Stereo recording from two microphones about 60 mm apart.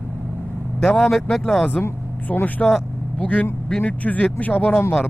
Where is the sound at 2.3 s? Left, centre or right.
Left.